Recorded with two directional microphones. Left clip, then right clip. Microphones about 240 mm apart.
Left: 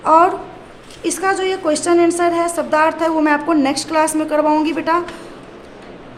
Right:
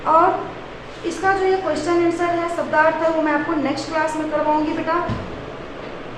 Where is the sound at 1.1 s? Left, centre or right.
Left.